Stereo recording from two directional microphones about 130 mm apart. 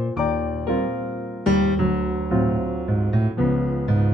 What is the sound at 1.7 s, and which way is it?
Music, centre (ahead or behind).